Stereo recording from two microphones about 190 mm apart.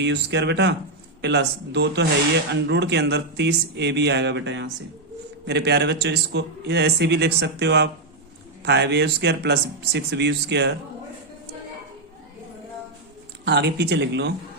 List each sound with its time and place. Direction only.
0.0 s speech: 65° right (ahead or behind)
13.4 s speech: 65° right (ahead or behind)